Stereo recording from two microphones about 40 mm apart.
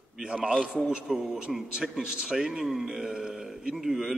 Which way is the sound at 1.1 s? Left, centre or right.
Centre.